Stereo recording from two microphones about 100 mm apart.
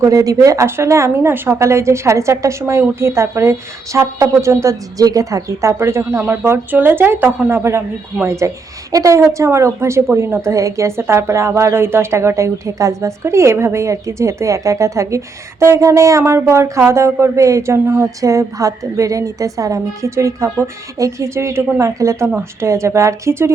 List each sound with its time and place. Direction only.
0.0 s a woman's voice: 35° right (ahead or behind)